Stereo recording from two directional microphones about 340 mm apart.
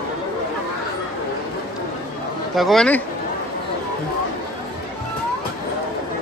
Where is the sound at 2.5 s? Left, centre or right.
Centre.